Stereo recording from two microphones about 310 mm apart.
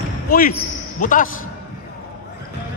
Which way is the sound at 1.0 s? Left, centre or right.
Left.